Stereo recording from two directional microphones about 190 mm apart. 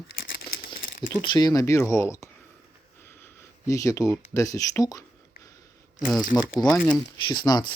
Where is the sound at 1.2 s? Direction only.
25° left (ahead or behind).